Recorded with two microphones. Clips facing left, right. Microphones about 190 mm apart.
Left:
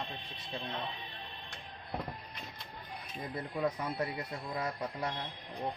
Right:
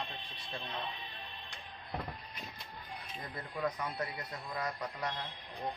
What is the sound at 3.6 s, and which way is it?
Speech, 30° left (ahead or behind).